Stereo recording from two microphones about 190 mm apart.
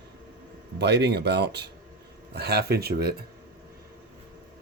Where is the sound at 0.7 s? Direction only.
65° right (ahead or behind).